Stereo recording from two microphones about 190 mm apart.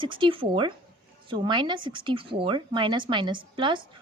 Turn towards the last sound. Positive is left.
turn(degrees=-25)  # may be behind; listen again after turning